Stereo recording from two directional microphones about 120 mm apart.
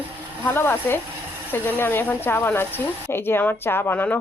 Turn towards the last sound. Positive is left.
turn(degrees=15)  # may be behind; listen again after turning